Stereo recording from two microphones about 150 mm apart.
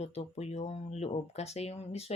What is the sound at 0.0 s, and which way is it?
Speech, 45° left (ahead or behind).